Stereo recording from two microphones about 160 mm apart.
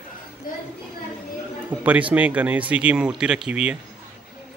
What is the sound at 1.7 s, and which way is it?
Speech, 10° right (ahead or behind).